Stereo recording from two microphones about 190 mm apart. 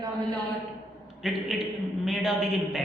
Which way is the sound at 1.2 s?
Centre (ahead or behind).